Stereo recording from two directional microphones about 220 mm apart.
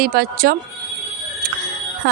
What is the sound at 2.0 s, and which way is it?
Speech, 50° right (ahead or behind).